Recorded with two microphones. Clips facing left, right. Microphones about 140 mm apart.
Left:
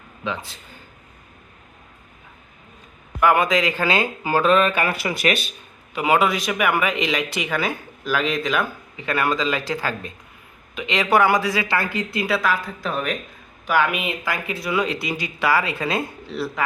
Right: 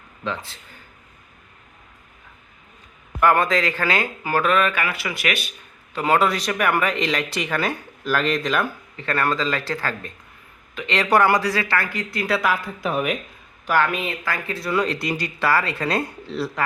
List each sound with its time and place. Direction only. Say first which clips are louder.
3.2 s speech: even; 10° left (ahead or behind); by 5.5 s 25° left (ahead or behind)
5.9 s speech: even; 10° left (ahead or behind)
12.5 s speech: right 1 dB; 10° right (ahead or behind)
13.7 s speech: even; 15° left (ahead or behind)